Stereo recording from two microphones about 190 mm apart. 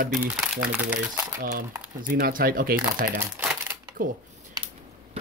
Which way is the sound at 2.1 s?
50° right (ahead or behind).